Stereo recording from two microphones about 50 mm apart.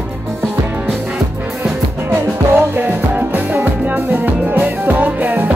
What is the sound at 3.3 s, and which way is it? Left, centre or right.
Music, right.